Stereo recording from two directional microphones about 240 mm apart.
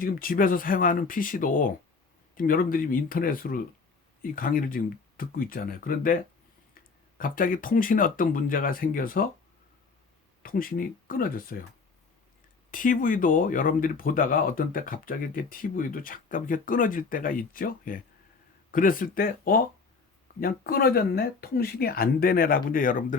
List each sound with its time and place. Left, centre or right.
0.0 s speech: left
7.2 s speech: left
10.4 s speech: left
12.7 s speech: left